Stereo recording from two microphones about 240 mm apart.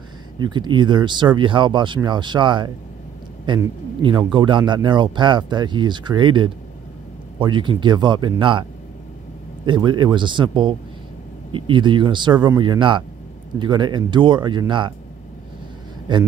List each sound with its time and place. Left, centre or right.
0.4 s a man's voice: centre
9.7 s a man's voice: centre
16.1 s a man's voice: centre